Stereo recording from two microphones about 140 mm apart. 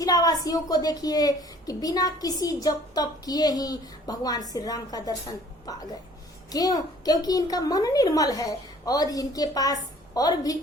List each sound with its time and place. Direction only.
0.0 s a woman's voice: 25° left (ahead or behind)